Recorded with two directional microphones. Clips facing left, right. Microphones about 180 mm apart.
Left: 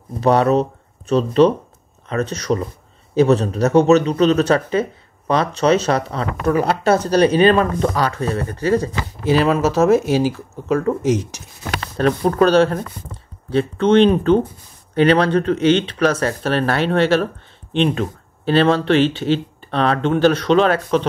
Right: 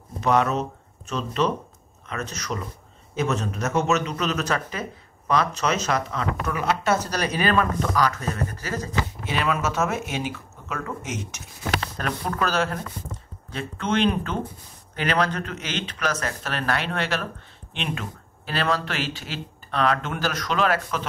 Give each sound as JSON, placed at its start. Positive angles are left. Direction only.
{"t": 0.2, "sound": "speech", "side_deg": 35}